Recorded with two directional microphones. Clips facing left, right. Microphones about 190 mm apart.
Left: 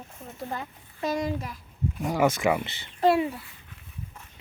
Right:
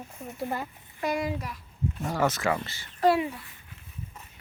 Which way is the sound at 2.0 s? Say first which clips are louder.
Left 4 dB; 15° left (ahead or behind).